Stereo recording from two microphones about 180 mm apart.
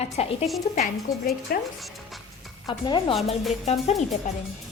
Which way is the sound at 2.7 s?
25° left (ahead or behind).